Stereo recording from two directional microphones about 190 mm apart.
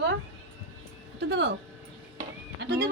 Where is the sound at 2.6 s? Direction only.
55° right (ahead or behind).